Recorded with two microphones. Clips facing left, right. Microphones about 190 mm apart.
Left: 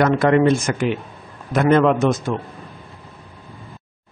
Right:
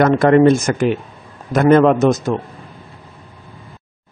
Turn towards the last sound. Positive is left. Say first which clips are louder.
# right 4 dB
turn(degrees=-40)  # may be behind; listen again after turning